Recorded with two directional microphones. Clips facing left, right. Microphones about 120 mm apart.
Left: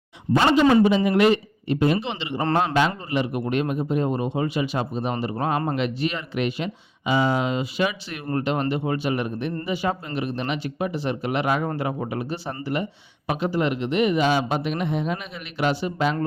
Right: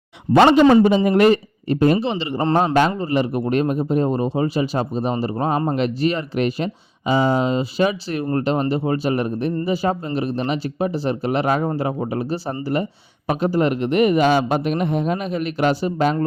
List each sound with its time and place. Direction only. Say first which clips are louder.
0.3 s a man's voice: right 6 dB; 65° right (ahead or behind)
0.6 s a man's voice: right 4 dB; 40° right (ahead or behind)